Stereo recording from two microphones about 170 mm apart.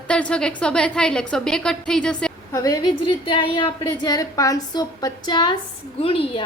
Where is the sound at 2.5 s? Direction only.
20° left (ahead or behind).